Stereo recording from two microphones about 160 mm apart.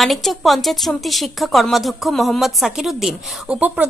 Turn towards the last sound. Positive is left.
turn(degrees=-5)  # may be behind; listen again after turning